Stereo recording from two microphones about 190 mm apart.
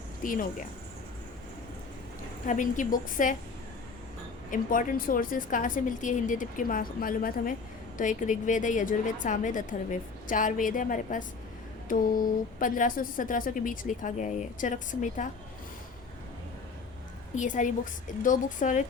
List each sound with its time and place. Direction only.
0.2 s speech: 45° left (ahead or behind)
2.5 s a woman's voice: 45° left (ahead or behind)
4.5 s a woman's voice: 45° left (ahead or behind)
17.3 s speech: 40° left (ahead or behind)